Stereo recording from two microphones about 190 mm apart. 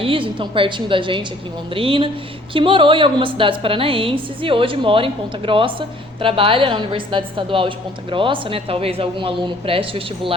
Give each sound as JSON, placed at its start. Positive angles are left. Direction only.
{"t": 0.0, "sound": "speech", "side_deg": -25}